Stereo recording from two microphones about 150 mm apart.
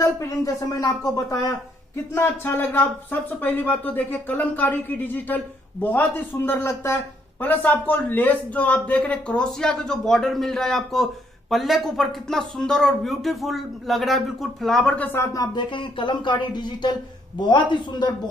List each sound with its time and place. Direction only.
0.0 s speech: 20° left (ahead or behind); by 15.0 s 5° left (ahead or behind)
15.1 s speech: 25° left (ahead or behind)